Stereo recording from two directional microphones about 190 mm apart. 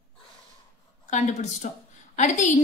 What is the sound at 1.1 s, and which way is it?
A woman's voice, 40° left (ahead or behind).